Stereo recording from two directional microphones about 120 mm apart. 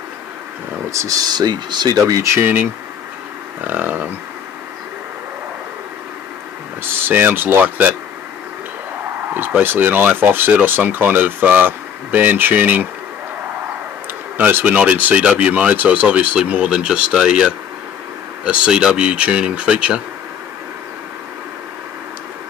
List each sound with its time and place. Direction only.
0.9 s speech: 30° right (ahead or behind)
2.3 s speech: 15° right (ahead or behind)
6.8 s speech: 20° right (ahead or behind)
9.3 s speech: 15° right (ahead or behind)
14.3 s speech: 15° right (ahead or behind)
18.4 s speech: 10° right (ahead or behind)